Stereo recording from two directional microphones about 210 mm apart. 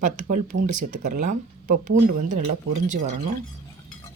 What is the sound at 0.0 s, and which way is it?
Speech, 40° right (ahead or behind).